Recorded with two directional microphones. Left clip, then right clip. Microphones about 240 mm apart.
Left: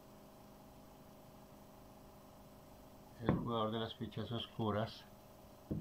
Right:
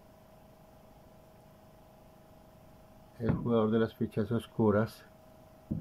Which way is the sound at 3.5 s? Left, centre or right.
Right.